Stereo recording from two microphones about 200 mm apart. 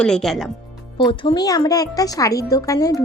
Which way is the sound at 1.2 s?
20° left (ahead or behind).